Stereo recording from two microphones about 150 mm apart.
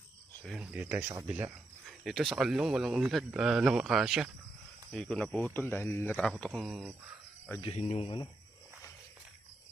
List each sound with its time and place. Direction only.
0.4 s speech: 5° right (ahead or behind)
7.6 s speech: 45° left (ahead or behind)